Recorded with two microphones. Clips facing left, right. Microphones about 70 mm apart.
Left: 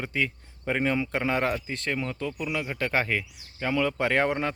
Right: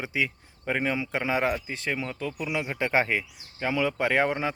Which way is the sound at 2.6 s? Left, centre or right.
Centre.